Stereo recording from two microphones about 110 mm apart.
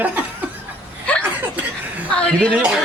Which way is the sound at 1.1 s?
10° left (ahead or behind).